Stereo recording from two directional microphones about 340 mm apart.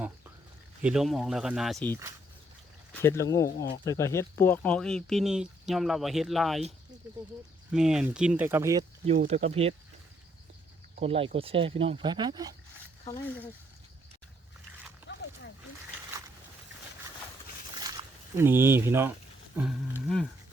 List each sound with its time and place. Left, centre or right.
0.8 s speech: centre
7.7 s speech: centre
11.0 s speech: centre
15.1 s a sound: left
17.9 s speech: centre